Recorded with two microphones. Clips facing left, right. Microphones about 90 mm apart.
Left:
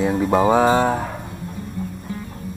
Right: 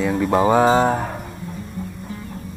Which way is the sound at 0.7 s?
25° right (ahead or behind).